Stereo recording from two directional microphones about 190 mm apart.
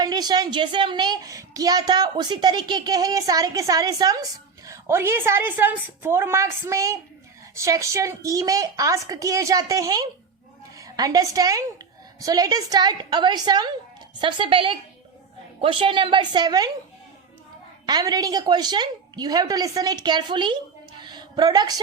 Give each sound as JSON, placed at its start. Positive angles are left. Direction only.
{"t": 0.0, "sound": "a child's voice", "side_deg": -20}
{"t": 17.8, "sound": "a child's voice", "side_deg": -20}
{"t": 21.0, "sound": "a sound", "side_deg": -25}